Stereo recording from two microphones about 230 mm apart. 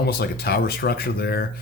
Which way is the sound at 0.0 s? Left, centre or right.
Left.